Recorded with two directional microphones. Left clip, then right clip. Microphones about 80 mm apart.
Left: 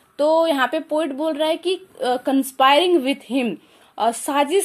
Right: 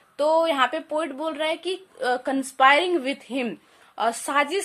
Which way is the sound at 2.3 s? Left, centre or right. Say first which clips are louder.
Left 2 dB; left.